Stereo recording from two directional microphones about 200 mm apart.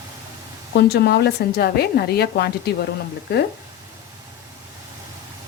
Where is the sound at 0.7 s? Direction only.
55° left (ahead or behind).